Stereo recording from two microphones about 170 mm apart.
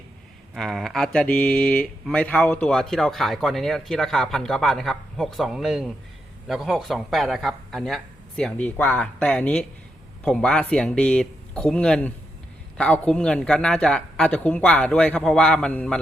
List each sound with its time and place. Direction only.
0.5 s speech: centre (ahead or behind)